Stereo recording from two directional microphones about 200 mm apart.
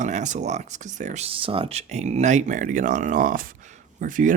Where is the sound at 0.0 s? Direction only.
40° right (ahead or behind).